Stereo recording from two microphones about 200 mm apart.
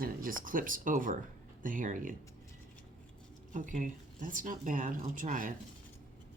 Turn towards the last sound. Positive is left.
turn(degrees=-40)  # may be behind; listen again after turning